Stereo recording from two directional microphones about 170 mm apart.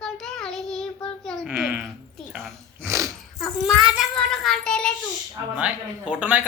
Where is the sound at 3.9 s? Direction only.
Centre (ahead or behind).